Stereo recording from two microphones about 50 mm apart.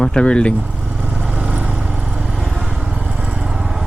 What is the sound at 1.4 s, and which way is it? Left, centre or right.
Vehicle, right.